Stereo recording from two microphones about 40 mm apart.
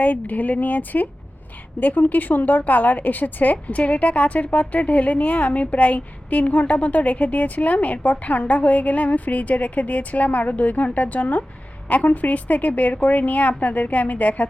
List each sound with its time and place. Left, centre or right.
0.0 s a woman's voice: left